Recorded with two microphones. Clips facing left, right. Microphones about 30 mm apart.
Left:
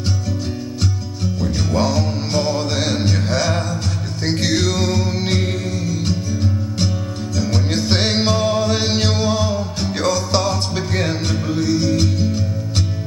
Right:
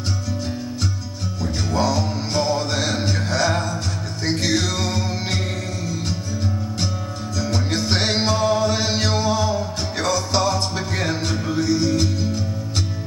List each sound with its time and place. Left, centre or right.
1.4 s music: left
7.3 s music: left
9.2 s music: left
9.5 s music: centre
11.6 s music: left